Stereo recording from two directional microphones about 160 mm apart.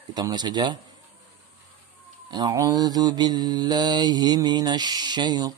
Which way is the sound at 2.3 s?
25° right (ahead or behind).